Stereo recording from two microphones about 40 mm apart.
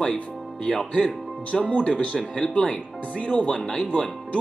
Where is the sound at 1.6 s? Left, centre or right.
Left.